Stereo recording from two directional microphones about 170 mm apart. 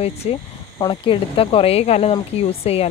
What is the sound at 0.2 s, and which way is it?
Speech, 40° left (ahead or behind).